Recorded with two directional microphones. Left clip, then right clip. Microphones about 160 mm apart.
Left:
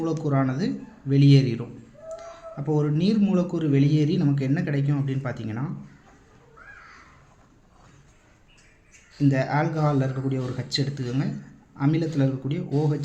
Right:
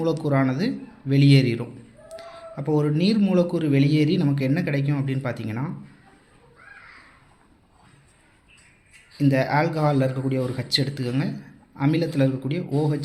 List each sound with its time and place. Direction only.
0.0 s a man's voice: 20° right (ahead or behind)
9.3 s a man's voice: 20° right (ahead or behind)